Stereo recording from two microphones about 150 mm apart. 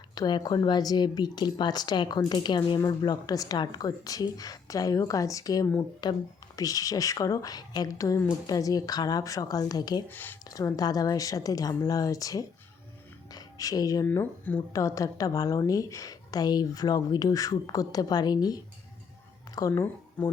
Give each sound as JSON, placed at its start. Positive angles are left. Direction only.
{"t": 0.1, "sound": "speech", "side_deg": 30}
{"t": 10.1, "sound": "speech", "side_deg": 15}
{"t": 10.5, "sound": "speech", "side_deg": 25}